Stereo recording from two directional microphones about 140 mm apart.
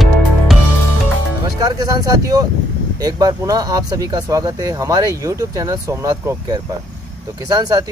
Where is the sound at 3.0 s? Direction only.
25° right (ahead or behind).